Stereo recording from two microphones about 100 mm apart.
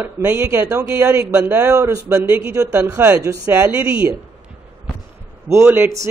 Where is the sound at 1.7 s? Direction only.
30° right (ahead or behind); by 4.0 s 15° right (ahead or behind).